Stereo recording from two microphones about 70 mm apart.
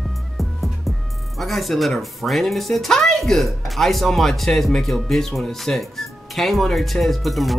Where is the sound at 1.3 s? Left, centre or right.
Centre.